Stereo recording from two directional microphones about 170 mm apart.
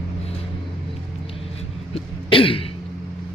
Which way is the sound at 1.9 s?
30° left (ahead or behind).